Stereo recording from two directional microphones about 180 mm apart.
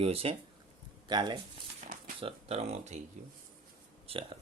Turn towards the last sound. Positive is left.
turn(degrees=-30)  # may be behind; listen again after turning